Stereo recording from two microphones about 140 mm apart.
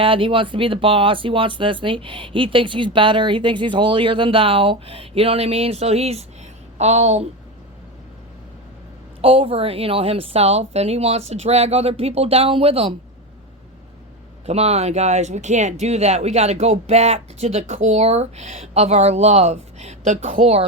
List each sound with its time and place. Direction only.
0.0 s speech: 40° right (ahead or behind)
9.2 s speech: 40° right (ahead or behind)
14.4 s speech: 50° right (ahead or behind)